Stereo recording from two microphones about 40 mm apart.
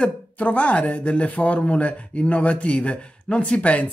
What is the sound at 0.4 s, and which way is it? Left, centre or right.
Speech, left.